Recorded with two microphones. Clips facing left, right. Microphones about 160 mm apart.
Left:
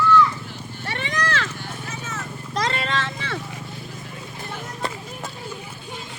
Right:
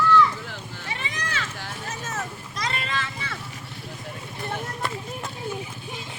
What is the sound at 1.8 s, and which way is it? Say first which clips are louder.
Vehicle: right 3 dB; 45° right (ahead or behind).